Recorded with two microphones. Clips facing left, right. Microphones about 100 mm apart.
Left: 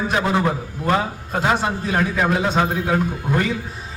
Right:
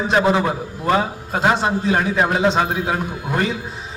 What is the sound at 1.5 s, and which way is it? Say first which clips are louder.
A man's voice: right 2 dB; 25° right (ahead or behind).